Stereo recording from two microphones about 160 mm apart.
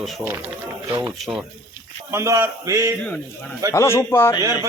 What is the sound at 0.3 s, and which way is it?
A man's voice, 10° right (ahead or behind).